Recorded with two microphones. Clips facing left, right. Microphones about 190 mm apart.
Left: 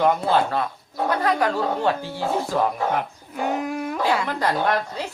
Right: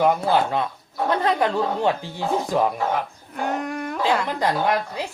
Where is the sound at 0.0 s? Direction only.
15° right (ahead or behind).